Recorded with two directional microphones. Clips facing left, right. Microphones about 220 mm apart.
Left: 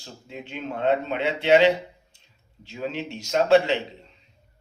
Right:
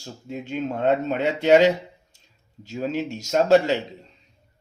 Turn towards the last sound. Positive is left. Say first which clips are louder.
# right 1 dB
turn(degrees=-45)  # may be behind; listen again after turning